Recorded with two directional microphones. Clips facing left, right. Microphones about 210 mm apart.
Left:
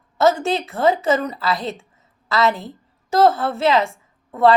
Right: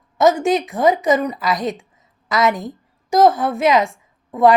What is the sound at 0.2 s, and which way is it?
A woman's voice, 15° right (ahead or behind).